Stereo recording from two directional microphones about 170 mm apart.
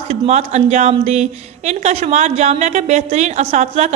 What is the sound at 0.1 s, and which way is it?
A woman's voice, 40° right (ahead or behind).